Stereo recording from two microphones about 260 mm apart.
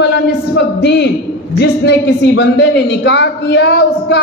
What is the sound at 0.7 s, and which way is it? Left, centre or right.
A man's voice, left.